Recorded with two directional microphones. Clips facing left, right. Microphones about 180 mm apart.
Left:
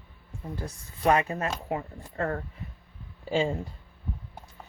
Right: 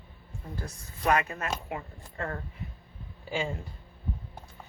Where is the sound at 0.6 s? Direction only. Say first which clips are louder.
Left 3 dB; 30° left (ahead or behind).